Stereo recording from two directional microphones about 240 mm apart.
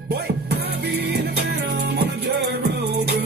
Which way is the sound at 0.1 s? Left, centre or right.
Right.